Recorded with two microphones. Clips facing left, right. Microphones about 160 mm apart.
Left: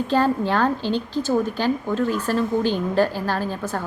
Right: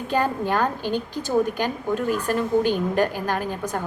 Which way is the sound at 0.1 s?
15° right (ahead or behind).